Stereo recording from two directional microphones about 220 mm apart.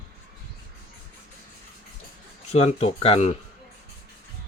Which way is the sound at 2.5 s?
30° left (ahead or behind).